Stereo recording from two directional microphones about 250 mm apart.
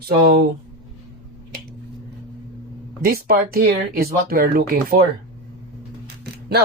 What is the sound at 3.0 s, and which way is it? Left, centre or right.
Speech, right.